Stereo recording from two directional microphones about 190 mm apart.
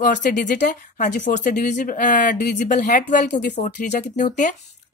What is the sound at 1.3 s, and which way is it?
A woman's voice, 40° left (ahead or behind).